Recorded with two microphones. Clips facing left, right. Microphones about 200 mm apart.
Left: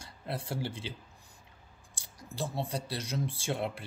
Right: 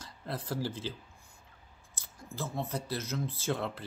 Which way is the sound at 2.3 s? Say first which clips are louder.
Left 2 dB; centre (ahead or behind).